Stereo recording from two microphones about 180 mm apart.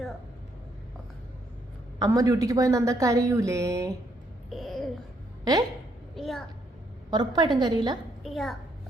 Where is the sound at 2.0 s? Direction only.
20° right (ahead or behind).